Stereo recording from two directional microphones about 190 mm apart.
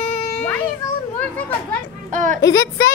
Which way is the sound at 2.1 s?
45° right (ahead or behind).